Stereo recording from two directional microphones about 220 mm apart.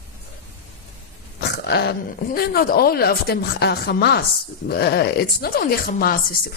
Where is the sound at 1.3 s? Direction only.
50° left (ahead or behind).